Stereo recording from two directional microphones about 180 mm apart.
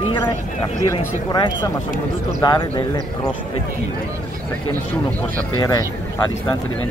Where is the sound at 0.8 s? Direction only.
20° left (ahead or behind).